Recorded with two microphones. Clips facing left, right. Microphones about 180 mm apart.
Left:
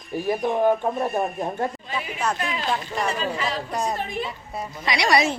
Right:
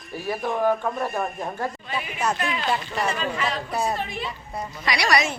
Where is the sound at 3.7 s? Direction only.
5° right (ahead or behind).